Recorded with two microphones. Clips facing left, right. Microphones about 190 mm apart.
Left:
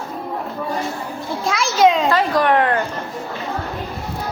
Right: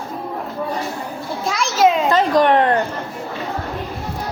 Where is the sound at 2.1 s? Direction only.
20° right (ahead or behind).